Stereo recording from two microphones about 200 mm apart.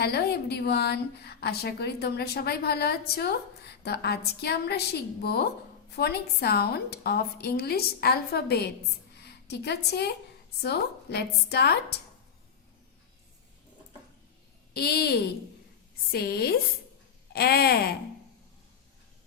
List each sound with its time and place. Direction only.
0.0 s a woman's voice: 55° left (ahead or behind)
14.7 s a woman's voice: 55° left (ahead or behind)